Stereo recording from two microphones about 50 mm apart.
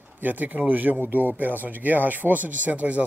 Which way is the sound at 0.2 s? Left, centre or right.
Right.